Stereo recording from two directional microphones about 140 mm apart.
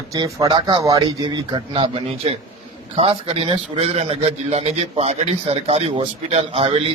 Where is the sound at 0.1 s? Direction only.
30° right (ahead or behind).